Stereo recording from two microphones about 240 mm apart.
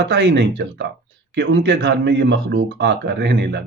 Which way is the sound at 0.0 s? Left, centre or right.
Right.